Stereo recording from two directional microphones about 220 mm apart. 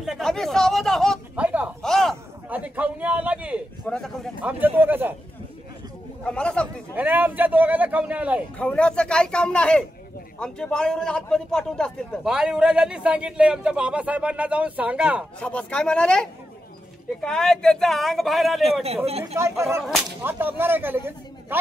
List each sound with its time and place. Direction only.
0.0 s a sound: centre (ahead or behind)
3.8 s speech: 5° left (ahead or behind)
6.2 s a man's voice: 5° left (ahead or behind)
7.0 s speech: 10° right (ahead or behind)
8.5 s a man's voice: 5° left (ahead or behind)
18.6 s a man's voice: 30° right (ahead or behind)
19.3 s speech: 10° right (ahead or behind)
19.8 s a man's voice: centre (ahead or behind)
20.2 s speech: 10° right (ahead or behind)